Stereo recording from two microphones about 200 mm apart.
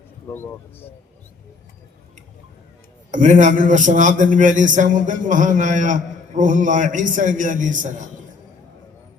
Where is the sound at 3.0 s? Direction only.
40° right (ahead or behind).